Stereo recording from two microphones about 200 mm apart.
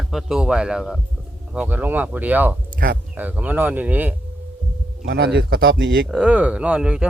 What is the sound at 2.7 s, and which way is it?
Speech, 45° right (ahead or behind).